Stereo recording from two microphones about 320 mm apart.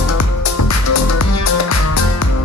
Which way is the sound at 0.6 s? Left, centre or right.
Left.